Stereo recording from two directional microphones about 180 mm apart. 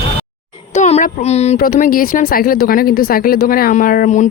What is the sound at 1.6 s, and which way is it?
Speech, 50° left (ahead or behind).